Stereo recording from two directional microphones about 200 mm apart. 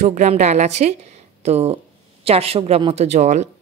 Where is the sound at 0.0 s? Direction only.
35° right (ahead or behind).